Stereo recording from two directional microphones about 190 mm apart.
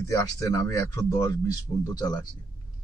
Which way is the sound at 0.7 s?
15° left (ahead or behind).